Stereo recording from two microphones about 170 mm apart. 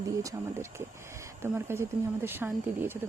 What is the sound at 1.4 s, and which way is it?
Speech, 15° right (ahead or behind).